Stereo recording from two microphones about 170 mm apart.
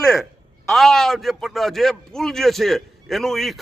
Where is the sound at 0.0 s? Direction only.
Centre (ahead or behind).